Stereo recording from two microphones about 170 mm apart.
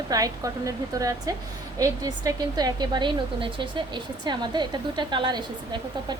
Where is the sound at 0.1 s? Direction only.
20° right (ahead or behind).